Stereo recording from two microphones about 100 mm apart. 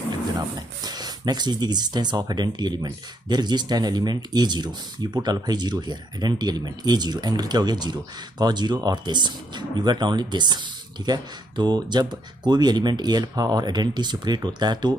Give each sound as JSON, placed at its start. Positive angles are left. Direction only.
{"t": 0.6, "sound": "speech", "side_deg": -45}